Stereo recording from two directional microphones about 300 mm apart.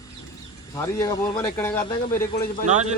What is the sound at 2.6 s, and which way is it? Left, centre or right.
Speech, right.